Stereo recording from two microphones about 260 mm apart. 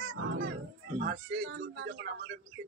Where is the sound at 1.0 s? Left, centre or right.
Right.